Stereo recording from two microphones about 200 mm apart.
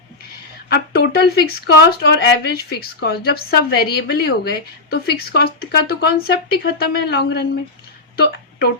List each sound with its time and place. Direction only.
0.7 s speech: 55° left (ahead or behind)